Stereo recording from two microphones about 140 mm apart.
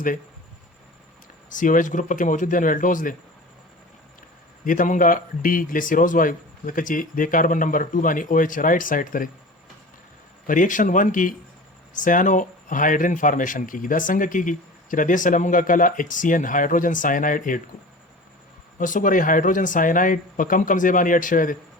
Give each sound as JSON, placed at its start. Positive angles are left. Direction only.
{"t": 1.5, "sound": "a man's voice", "side_deg": 70}
{"t": 4.6, "sound": "a man's voice", "side_deg": 70}
{"t": 10.4, "sound": "a man's voice", "side_deg": 70}
{"t": 18.8, "sound": "a man's voice", "side_deg": 70}